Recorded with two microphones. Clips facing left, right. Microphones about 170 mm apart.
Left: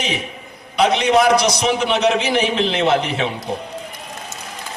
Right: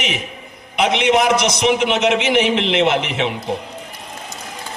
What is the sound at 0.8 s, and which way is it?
A man's voice, 20° right (ahead or behind).